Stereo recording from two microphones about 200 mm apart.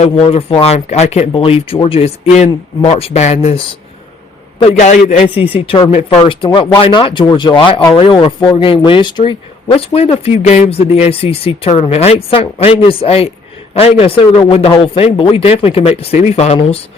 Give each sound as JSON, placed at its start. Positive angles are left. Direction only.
{"t": 0.0, "sound": "speech", "side_deg": 30}
{"t": 4.8, "sound": "speech", "side_deg": 35}